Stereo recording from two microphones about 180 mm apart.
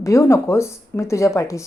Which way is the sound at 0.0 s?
15° left (ahead or behind).